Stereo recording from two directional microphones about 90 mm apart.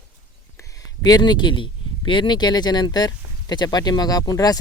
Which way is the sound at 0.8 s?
45° left (ahead or behind).